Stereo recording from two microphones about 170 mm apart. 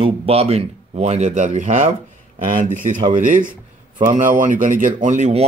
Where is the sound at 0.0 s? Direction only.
35° right (ahead or behind).